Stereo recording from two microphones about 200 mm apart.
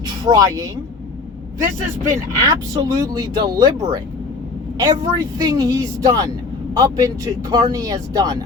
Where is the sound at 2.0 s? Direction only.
15° right (ahead or behind).